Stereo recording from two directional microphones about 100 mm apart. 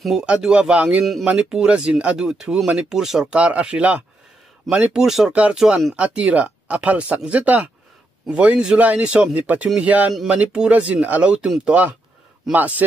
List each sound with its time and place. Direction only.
0.0 s speech: 5° right (ahead or behind)
5.9 s speech: 15° right (ahead or behind)